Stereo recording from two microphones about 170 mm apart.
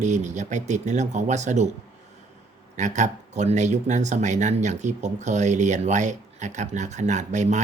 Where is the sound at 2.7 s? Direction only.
45° right (ahead or behind).